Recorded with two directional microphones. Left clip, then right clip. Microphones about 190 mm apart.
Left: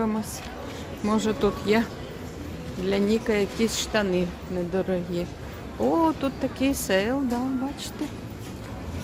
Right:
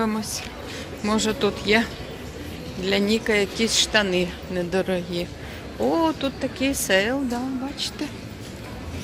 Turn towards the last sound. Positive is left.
turn(degrees=15)  # may be behind; listen again after turning